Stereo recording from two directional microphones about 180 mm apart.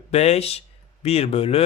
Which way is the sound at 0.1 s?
35° left (ahead or behind).